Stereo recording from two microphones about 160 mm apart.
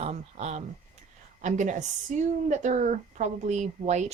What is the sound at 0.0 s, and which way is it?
Speech, 40° right (ahead or behind).